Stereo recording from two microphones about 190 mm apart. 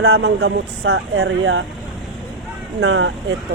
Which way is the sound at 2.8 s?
65° right (ahead or behind).